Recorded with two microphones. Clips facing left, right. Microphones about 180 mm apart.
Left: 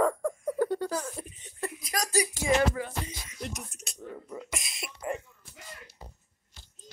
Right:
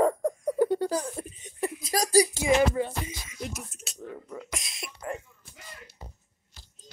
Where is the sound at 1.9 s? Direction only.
35° right (ahead or behind).